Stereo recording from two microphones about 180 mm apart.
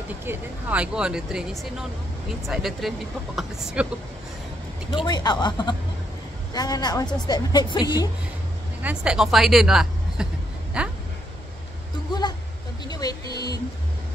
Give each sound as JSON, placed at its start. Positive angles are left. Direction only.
{"t": 0.2, "sound": "speech", "side_deg": -10}
{"t": 5.0, "sound": "speech", "side_deg": 25}
{"t": 8.8, "sound": "speech", "side_deg": -5}
{"t": 12.1, "sound": "a sound", "side_deg": 25}